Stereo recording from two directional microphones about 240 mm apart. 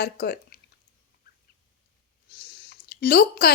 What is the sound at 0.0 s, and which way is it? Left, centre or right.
Speech, left.